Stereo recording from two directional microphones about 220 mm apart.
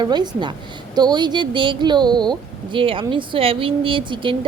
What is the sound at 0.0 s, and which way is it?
Speech, 20° right (ahead or behind).